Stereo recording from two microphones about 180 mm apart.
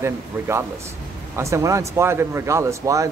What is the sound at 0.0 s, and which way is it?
Speech, 15° right (ahead or behind).